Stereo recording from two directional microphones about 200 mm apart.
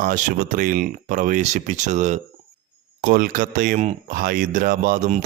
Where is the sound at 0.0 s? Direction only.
40° right (ahead or behind).